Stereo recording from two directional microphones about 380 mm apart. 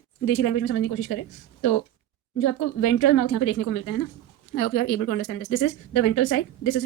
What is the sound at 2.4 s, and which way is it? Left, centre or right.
Speech, left.